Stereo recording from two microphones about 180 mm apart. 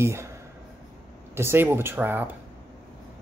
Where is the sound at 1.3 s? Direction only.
15° right (ahead or behind).